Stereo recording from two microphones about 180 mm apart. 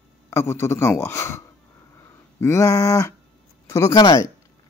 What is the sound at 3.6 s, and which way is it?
Speech, 20° left (ahead or behind).